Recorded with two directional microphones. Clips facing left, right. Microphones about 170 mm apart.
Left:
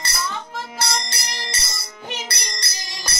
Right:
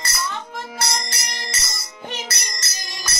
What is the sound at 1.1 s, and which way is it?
Music, 30° left (ahead or behind).